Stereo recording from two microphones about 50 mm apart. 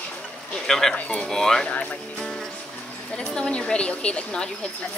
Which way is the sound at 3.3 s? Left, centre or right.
Centre.